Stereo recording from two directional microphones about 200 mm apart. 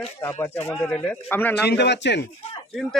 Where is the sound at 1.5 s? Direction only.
55° left (ahead or behind).